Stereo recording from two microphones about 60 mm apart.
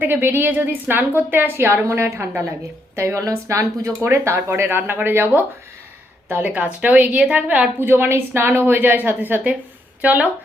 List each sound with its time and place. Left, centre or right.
0.0 s a woman's voice: right
3.2 s a woman's voice: right
7.8 s a woman's voice: right